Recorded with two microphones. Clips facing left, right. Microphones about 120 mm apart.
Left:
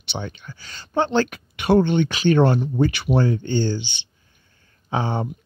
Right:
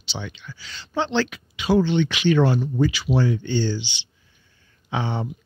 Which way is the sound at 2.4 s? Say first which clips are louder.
Left 2 dB; 55° left (ahead or behind).